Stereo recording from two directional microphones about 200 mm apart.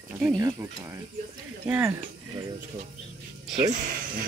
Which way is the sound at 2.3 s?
25° right (ahead or behind).